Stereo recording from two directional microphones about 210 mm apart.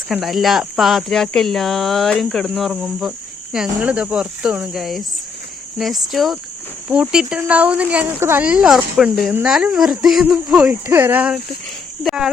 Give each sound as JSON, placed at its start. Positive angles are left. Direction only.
{"t": 0.1, "sound": "speech", "side_deg": 0}